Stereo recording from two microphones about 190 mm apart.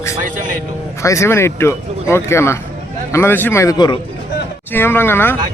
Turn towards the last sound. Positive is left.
turn(degrees=10)  # may be behind; listen again after turning